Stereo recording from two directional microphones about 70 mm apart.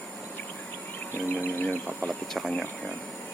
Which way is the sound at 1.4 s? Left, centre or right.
Left.